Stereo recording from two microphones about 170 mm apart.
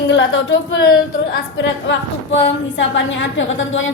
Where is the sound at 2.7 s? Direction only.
90° left.